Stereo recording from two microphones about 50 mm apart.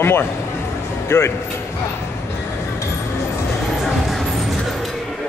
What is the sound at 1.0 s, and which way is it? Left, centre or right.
Speech, left.